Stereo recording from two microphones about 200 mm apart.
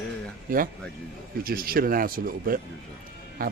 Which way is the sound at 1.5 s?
45° right (ahead or behind).